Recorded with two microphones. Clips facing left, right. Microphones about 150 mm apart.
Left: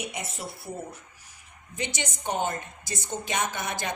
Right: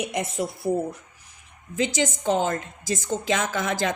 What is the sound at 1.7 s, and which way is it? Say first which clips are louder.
A woman's voice: right 9 dB; 90° right.